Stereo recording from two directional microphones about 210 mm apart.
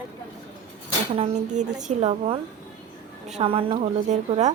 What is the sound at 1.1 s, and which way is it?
A woman's voice, 30° right (ahead or behind).